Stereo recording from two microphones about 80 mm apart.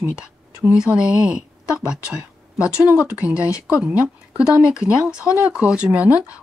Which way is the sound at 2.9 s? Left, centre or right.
Centre.